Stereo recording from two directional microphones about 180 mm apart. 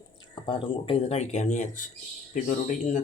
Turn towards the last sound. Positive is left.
turn(degrees=45)  # may be behind; listen again after turning